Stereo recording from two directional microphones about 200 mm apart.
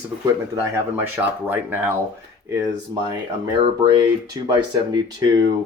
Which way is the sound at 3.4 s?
20° right (ahead or behind).